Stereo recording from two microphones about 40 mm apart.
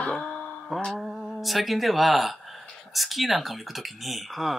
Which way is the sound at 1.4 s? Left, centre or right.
Centre.